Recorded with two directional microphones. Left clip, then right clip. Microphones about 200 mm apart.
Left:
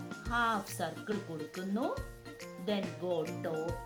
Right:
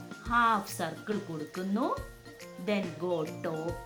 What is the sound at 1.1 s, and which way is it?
Speech, centre (ahead or behind).